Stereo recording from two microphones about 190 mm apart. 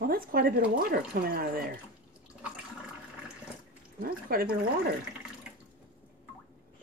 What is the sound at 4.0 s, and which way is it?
Speech, 50° right (ahead or behind).